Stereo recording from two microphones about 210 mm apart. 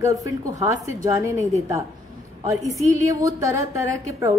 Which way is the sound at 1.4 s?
30° right (ahead or behind).